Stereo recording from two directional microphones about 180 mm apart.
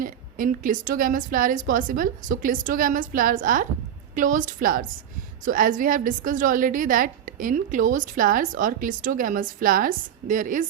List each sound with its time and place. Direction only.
0.0 s a woman's voice: 50° right (ahead or behind)